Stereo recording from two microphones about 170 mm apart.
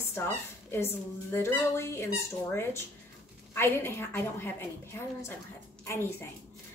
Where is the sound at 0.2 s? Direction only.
15° left (ahead or behind).